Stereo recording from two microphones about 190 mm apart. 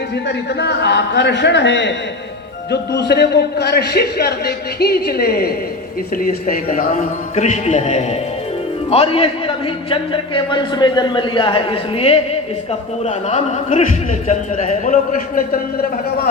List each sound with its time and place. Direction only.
0.3 s a man's voice: 60° left (ahead or behind)
2.9 s a man's voice: 60° left (ahead or behind)